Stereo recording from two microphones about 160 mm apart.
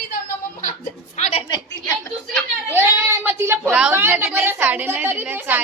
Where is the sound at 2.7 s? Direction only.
15° right (ahead or behind).